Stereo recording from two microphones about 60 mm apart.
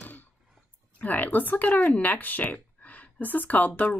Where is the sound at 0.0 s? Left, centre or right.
Left.